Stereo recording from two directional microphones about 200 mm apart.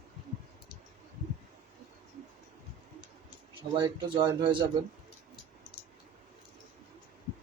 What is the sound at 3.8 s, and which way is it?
Speech, 25° right (ahead or behind).